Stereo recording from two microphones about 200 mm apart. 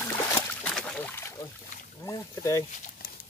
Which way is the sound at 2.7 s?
40° left (ahead or behind).